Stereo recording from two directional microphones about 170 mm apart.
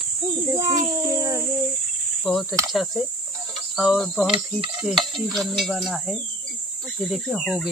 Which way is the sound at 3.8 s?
Centre (ahead or behind).